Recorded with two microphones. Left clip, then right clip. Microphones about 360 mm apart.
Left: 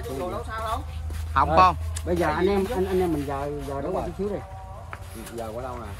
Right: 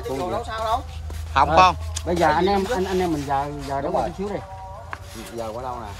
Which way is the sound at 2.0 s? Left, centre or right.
Right.